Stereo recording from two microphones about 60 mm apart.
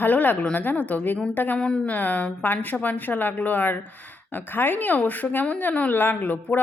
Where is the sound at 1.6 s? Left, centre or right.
Centre.